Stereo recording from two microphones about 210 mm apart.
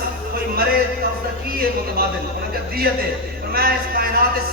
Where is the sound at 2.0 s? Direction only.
45° right (ahead or behind).